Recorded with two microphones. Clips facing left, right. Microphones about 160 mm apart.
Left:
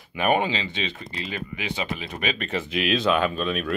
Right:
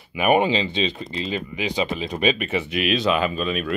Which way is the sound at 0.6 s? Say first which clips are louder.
Right 6 dB; 30° right (ahead or behind).